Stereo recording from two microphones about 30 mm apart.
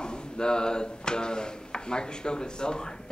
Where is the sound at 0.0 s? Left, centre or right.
Left.